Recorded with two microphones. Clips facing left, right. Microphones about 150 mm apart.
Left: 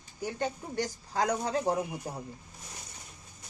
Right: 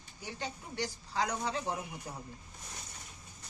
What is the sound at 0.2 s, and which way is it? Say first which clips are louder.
Speech: left 8 dB; 45° left (ahead or behind).